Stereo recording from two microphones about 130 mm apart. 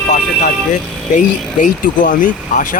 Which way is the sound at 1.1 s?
90° left.